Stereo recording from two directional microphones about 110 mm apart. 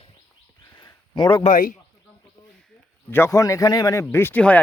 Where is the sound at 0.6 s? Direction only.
35° left (ahead or behind).